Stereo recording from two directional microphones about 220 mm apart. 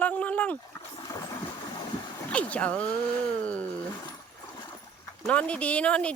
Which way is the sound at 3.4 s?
5° left (ahead or behind).